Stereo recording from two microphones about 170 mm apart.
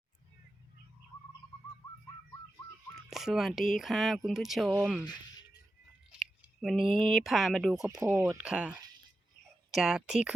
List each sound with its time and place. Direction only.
3.1 s speech: centre (ahead or behind)
6.4 s a sound: centre (ahead or behind)
7.0 s speech: centre (ahead or behind)
8.0 s speech: 15° right (ahead or behind)
8.4 s speech: 5° right (ahead or behind)